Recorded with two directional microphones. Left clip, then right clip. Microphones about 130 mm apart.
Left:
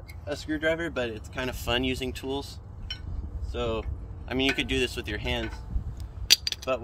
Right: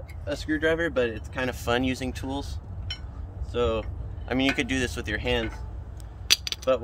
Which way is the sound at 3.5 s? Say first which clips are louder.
Right 5 dB; 10° right (ahead or behind).